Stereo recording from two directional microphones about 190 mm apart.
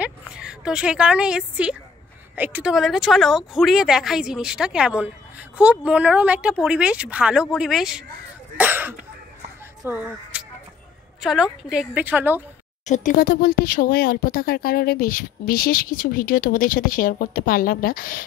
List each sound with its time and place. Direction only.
0.0 s a woman's voice: 5° right (ahead or behind)
8.5 s cough: 10° right (ahead or behind)
9.8 s a woman's voice: 10° right (ahead or behind)
12.8 s speech: 40° left (ahead or behind)